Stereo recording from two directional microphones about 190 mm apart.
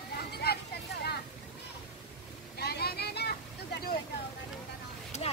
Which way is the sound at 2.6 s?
55° left (ahead or behind).